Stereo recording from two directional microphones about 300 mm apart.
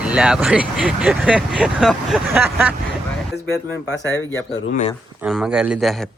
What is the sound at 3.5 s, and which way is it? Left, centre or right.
Speech, left.